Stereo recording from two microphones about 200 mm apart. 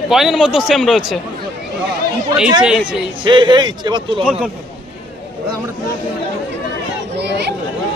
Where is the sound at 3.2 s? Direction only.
25° right (ahead or behind).